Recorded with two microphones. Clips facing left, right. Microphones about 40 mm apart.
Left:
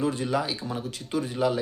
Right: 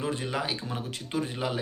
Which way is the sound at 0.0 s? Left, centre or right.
Right.